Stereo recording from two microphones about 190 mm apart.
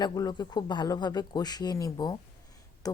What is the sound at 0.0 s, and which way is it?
Speech, 20° left (ahead or behind).